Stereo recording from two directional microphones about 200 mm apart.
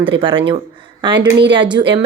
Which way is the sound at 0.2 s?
25° right (ahead or behind).